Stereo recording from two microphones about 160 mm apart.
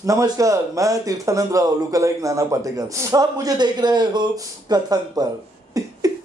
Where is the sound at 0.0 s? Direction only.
20° right (ahead or behind).